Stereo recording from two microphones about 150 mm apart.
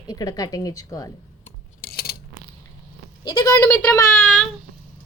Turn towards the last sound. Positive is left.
turn(degrees=5)  # may be behind; listen again after turning